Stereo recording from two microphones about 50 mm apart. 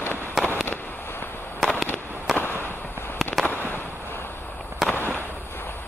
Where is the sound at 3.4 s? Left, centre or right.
Left.